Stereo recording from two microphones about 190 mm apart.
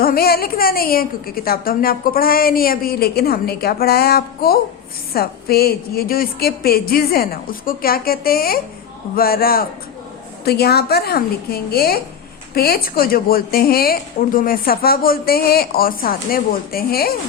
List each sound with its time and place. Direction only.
0.0 s a woman's voice: 55° left (ahead or behind)